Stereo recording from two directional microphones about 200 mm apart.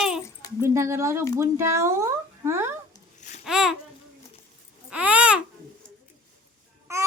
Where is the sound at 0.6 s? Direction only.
15° right (ahead or behind).